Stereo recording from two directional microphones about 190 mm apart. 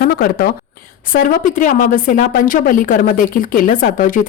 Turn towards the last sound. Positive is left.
turn(degrees=45)  # may be behind; listen again after turning